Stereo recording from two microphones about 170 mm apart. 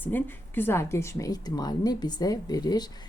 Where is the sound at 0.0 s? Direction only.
10° left (ahead or behind).